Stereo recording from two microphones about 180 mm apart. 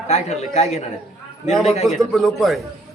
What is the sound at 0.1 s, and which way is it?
Speech, 35° left (ahead or behind).